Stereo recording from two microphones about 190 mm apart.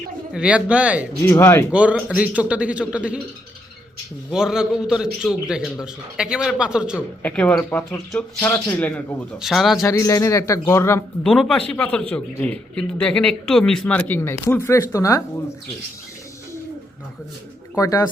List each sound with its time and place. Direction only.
0.3 s a man's voice: 5° right (ahead or behind)
1.3 s speech: 15° left (ahead or behind)
1.7 s a man's voice: 5° right (ahead or behind)
4.3 s a man's voice: 5° right (ahead or behind)
7.2 s a man's voice: 10° left (ahead or behind)
9.8 s speech: 15° left (ahead or behind)
11.2 s a man's voice: 5° left (ahead or behind)
17.7 s speech: 20° left (ahead or behind)